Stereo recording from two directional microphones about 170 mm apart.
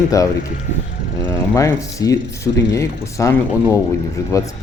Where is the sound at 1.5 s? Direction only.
20° left (ahead or behind).